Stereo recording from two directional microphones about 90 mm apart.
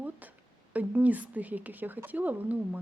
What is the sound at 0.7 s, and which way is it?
A woman's voice, 15° right (ahead or behind).